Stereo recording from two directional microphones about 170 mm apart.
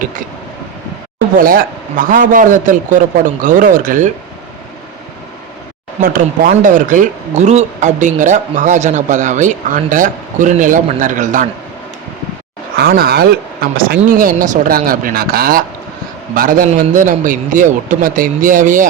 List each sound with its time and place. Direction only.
1.4 s speech: 55° right (ahead or behind)
6.0 s speech: 55° right (ahead or behind)
12.7 s speech: 65° right (ahead or behind); by 18.9 s 50° right (ahead or behind)